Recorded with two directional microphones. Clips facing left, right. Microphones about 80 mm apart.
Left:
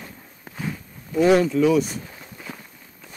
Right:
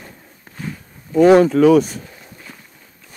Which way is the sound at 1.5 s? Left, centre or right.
Right.